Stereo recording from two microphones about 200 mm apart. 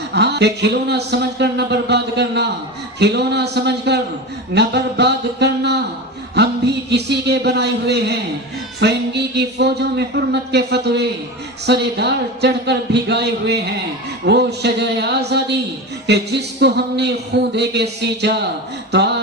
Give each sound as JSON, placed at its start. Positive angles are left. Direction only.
{"t": 0.1, "sound": "speech", "side_deg": -55}